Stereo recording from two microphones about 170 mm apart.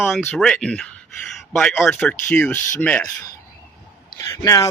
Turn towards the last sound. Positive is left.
turn(degrees=20)  # may be behind; listen again after turning